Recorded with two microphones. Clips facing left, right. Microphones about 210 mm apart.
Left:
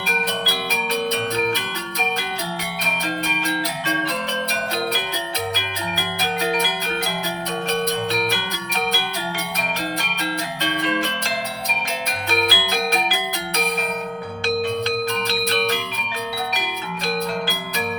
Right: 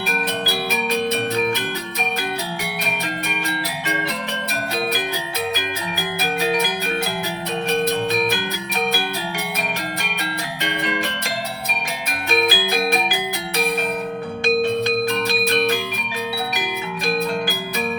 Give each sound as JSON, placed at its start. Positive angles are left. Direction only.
{"t": 7.7, "sound": "music", "side_deg": -15}
{"t": 12.3, "sound": "music", "side_deg": -15}
{"t": 14.4, "sound": "music", "side_deg": -15}